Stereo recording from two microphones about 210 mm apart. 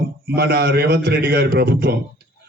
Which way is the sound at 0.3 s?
50° right (ahead or behind).